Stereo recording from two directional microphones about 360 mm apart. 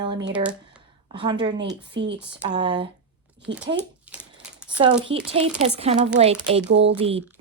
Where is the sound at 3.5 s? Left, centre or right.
Right.